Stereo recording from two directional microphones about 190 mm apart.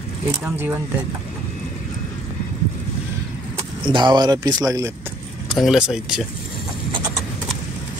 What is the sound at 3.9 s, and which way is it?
Speech, 25° right (ahead or behind).